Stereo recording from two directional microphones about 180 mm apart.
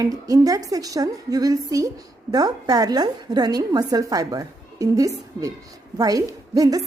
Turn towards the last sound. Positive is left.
turn(degrees=-20)  # may be behind; listen again after turning